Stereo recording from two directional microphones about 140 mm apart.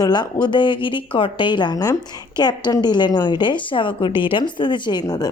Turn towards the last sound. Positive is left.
turn(degrees=30)  # may be behind; listen again after turning